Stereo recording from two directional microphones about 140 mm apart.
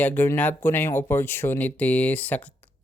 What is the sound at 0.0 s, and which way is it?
Speech, 10° left (ahead or behind).